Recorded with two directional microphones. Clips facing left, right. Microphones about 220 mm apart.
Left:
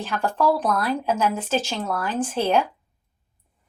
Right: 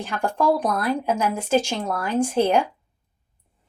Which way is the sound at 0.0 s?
15° right (ahead or behind).